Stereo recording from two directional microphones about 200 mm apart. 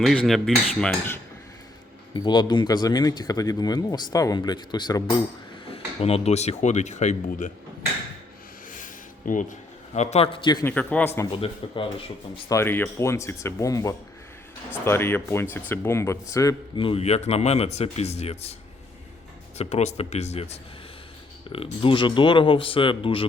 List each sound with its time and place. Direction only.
0.3 s cutlery: centre (ahead or behind)
0.8 s speech: 5° left (ahead or behind)
2.1 s speech: 20° left (ahead or behind); by 7.5 s 35° left (ahead or behind)
8.7 s a man's voice: 40° left (ahead or behind); by 11.3 s 10° left (ahead or behind)
11.3 s speech: 25° left (ahead or behind)
12.5 s speech: 10° left (ahead or behind); by 18.5 s 30° left (ahead or behind)
19.5 s speech: 35° left (ahead or behind)